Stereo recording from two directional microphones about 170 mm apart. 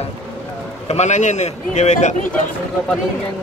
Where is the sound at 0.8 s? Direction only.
45° left (ahead or behind).